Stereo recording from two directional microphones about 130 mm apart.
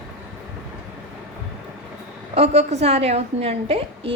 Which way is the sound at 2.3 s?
55° right (ahead or behind).